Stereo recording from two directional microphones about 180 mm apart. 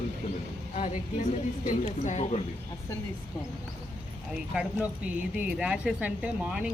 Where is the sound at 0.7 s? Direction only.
40° left (ahead or behind).